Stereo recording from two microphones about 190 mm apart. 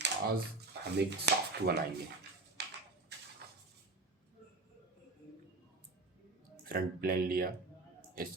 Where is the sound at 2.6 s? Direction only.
60° right (ahead or behind).